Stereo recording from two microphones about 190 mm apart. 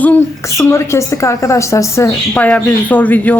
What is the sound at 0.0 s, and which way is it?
A woman's voice, 10° left (ahead or behind).